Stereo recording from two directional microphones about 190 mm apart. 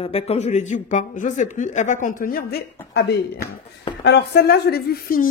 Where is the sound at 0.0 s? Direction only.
30° left (ahead or behind).